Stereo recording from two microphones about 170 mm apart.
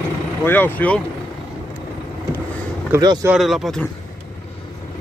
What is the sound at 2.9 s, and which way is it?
Speech, 20° right (ahead or behind).